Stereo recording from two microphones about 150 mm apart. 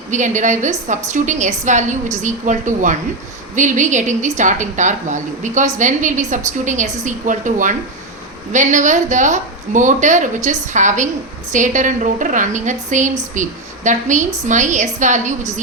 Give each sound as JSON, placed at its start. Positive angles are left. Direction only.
{"t": 0.1, "sound": "a woman's voice", "side_deg": -55}